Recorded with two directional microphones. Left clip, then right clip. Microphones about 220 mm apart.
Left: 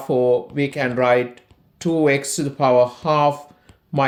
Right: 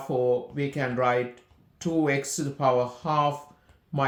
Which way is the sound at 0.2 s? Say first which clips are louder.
Left 6 dB; 35° left (ahead or behind).